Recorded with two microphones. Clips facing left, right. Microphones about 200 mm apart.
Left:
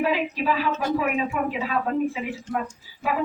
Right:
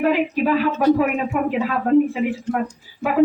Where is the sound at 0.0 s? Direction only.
50° right (ahead or behind).